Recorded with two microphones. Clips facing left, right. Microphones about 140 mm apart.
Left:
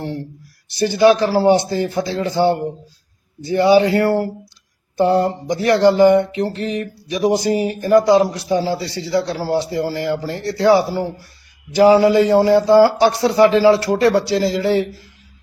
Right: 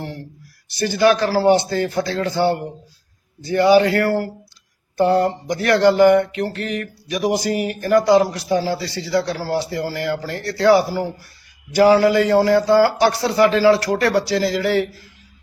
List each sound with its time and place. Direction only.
0.8 s speech: 20° left (ahead or behind)
11.8 s speech: 25° left (ahead or behind)